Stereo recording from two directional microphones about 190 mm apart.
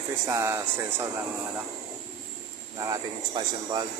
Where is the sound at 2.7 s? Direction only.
20° right (ahead or behind).